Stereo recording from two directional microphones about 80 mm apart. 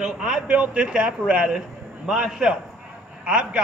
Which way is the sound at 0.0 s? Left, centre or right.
Centre.